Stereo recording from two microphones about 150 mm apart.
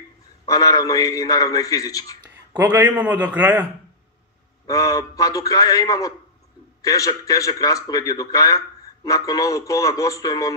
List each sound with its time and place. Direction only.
0.5 s a man's voice: 25° left (ahead or behind)
2.5 s a man's voice: 10° right (ahead or behind)
4.6 s a man's voice: 20° left (ahead or behind)